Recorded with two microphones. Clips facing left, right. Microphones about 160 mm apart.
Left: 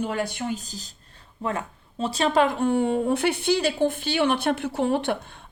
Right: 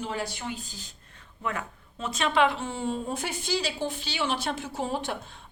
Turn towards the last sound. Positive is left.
turn(degrees=65)  # may be behind; listen again after turning